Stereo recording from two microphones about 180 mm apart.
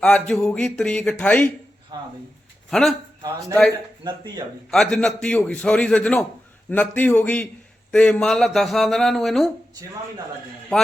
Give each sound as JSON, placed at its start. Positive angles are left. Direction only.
{"t": 0.0, "sound": "speech", "side_deg": 5}
{"t": 1.9, "sound": "speech", "side_deg": -25}
{"t": 2.6, "sound": "a man's voice", "side_deg": 0}
{"t": 4.0, "sound": "speech", "side_deg": -20}
{"t": 4.7, "sound": "a man's voice", "side_deg": 5}